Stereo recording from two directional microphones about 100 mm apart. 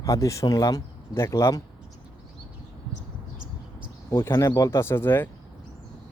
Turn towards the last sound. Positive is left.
turn(degrees=20)  # may be behind; listen again after turning